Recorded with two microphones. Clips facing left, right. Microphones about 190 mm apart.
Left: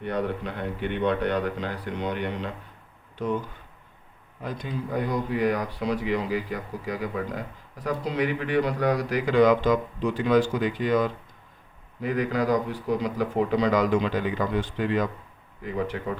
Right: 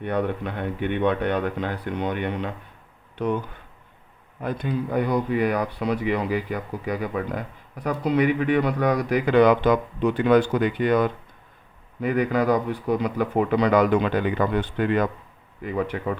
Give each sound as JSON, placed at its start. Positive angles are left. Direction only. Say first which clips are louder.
{"t": 0.0, "sound": "speech", "louder": "right 3 dB", "side_deg": -55}
{"t": 4.4, "sound": "speech", "louder": "right 5 dB", "side_deg": -60}